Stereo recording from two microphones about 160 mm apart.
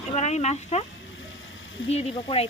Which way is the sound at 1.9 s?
40° left (ahead or behind).